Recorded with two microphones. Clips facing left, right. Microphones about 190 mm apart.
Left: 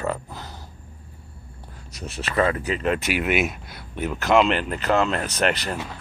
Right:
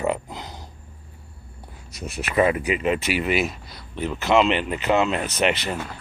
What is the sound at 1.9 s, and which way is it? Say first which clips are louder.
Speech: right 2 dB; 10° right (ahead or behind).